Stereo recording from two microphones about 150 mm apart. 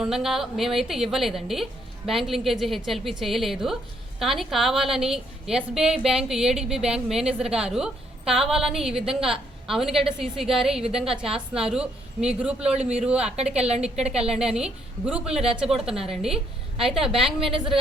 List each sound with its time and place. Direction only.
0.0 s a woman's voice: 5° right (ahead or behind)
13.3 s a woman's voice: 45° right (ahead or behind)
13.6 s a woman's voice: 5° right (ahead or behind)